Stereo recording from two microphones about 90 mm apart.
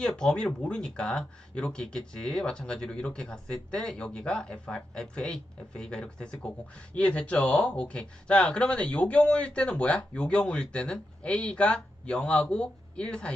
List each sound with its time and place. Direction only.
0.2 s speech: 5° left (ahead or behind)